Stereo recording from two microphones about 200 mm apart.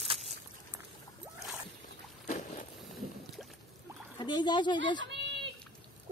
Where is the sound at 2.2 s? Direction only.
35° left (ahead or behind).